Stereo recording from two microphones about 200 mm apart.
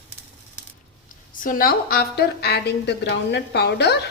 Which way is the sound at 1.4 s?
45° left (ahead or behind).